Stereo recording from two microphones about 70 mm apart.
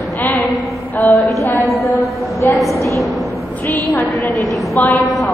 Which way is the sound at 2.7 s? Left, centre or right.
Right.